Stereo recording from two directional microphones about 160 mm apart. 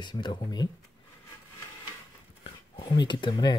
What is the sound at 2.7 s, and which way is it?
Speech, 25° left (ahead or behind).